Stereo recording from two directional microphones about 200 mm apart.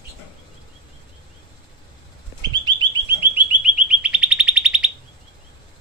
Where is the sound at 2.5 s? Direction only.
20° right (ahead or behind).